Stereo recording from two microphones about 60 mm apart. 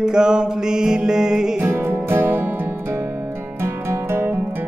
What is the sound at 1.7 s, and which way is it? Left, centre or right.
Music, right.